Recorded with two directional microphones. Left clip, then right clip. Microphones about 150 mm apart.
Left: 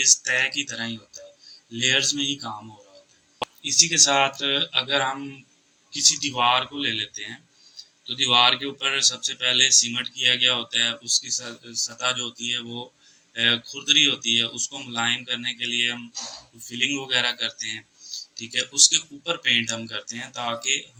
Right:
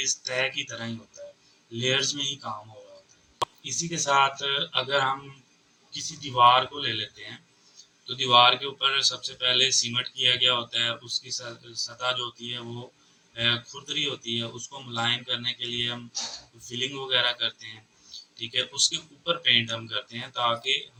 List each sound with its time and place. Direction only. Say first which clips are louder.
0.0 s speech: left 7 dB; 45° left (ahead or behind)
3.6 s speech: left 12 dB; 40° left (ahead or behind)